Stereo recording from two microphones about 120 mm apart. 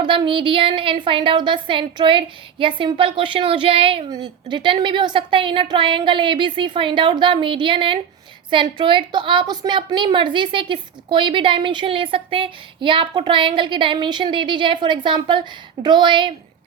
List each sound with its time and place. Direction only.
0.0 s a woman's voice: 40° right (ahead or behind)
4.1 s a woman's voice: 40° right (ahead or behind)